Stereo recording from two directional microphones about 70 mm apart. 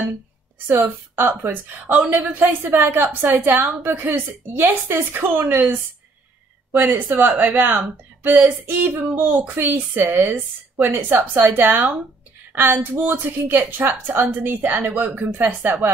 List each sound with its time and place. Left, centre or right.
0.7 s a woman's voice: right